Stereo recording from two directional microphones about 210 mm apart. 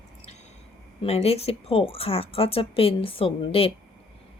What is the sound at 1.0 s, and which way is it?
Speech, 30° left (ahead or behind).